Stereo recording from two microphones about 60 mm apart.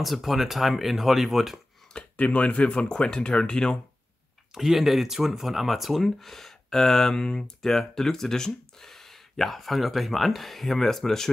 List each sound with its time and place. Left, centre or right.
0.0 s speech: centre
2.0 s speech: left
4.6 s speech: centre